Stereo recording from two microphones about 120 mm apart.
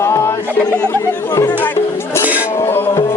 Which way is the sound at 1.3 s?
25° left (ahead or behind).